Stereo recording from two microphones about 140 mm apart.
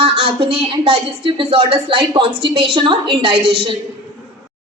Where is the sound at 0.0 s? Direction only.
40° right (ahead or behind).